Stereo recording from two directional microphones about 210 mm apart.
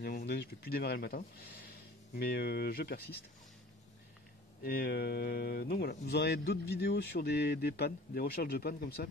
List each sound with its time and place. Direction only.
0.3 s speech: 50° left (ahead or behind)
4.6 s speech: 45° left (ahead or behind)